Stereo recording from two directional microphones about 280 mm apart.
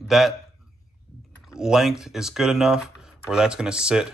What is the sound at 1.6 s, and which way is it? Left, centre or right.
Speech, centre.